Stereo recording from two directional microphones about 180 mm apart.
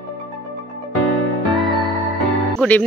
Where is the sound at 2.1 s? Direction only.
5° left (ahead or behind).